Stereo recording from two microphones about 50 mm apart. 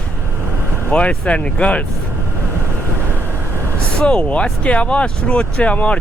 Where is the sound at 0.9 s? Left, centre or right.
Left.